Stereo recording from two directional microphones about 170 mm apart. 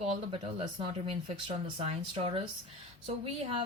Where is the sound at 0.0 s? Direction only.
35° right (ahead or behind).